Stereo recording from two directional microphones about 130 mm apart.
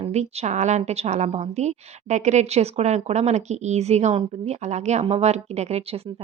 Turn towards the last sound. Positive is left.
turn(degrees=-55)  # may be behind; listen again after turning